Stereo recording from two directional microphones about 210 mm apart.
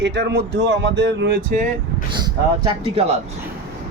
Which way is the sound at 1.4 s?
35° right (ahead or behind).